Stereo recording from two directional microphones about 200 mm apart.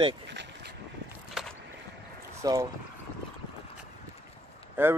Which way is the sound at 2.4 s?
15° right (ahead or behind).